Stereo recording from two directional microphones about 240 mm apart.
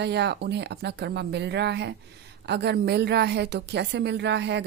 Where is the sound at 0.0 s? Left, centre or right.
Right.